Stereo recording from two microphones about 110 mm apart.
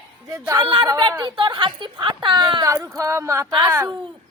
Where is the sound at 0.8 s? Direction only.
35° right (ahead or behind).